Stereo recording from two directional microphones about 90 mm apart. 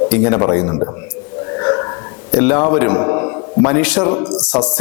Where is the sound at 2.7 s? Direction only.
15° left (ahead or behind).